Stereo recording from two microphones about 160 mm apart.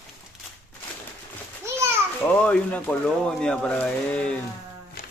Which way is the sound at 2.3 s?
10° left (ahead or behind).